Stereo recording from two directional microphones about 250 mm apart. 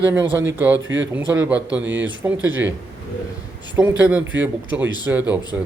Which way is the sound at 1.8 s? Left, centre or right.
Right.